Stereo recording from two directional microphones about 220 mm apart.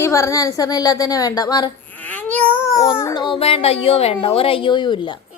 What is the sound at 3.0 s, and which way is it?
Speech, 15° left (ahead or behind).